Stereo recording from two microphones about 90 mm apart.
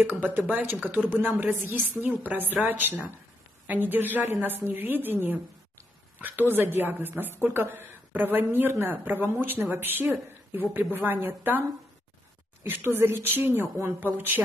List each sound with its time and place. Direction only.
0.0 s a woman's voice: 20° right (ahead or behind)
6.5 s a woman's voice: 25° right (ahead or behind)
12.6 s a woman's voice: 25° right (ahead or behind)